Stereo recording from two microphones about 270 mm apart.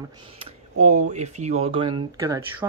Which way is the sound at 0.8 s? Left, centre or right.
Right.